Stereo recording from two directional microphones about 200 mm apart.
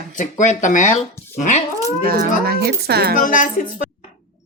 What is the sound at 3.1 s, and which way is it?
Speech, 40° left (ahead or behind).